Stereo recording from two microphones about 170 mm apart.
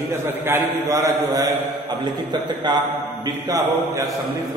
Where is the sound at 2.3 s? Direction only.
25° right (ahead or behind).